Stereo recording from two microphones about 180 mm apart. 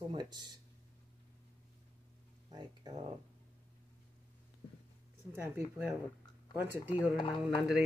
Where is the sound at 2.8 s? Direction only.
20° right (ahead or behind).